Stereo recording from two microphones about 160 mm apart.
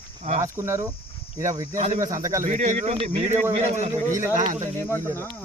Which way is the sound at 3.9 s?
20° right (ahead or behind).